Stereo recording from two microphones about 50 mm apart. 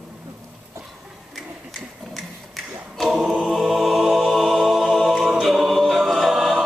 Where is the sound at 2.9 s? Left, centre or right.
Centre.